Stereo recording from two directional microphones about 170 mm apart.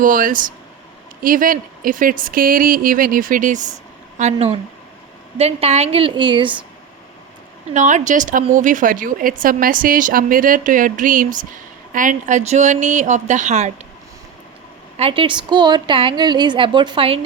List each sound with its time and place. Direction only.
0.0 s a woman's voice: 55° right (ahead or behind); by 6.6 s 30° right (ahead or behind)
7.7 s a woman's voice: 45° right (ahead or behind)
14.9 s a woman's voice: 35° right (ahead or behind)